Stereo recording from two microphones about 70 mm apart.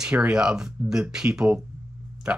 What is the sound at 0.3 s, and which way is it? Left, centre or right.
Speech, centre.